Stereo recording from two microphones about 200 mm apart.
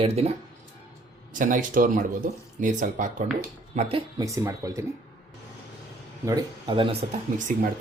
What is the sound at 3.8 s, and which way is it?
Speech, 30° right (ahead or behind).